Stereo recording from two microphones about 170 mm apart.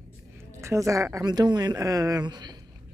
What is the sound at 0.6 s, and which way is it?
A woman's voice, 20° right (ahead or behind).